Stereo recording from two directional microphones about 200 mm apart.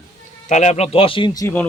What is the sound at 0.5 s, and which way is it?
Speech, 35° left (ahead or behind).